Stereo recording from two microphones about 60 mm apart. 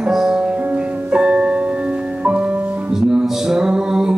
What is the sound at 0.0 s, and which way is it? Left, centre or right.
Music, centre.